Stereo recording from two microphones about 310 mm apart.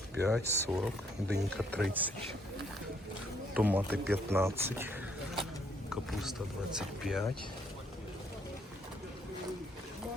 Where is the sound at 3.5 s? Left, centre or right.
Centre.